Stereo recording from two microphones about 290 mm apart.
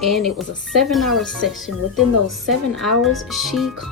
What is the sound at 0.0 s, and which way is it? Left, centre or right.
Speech, centre.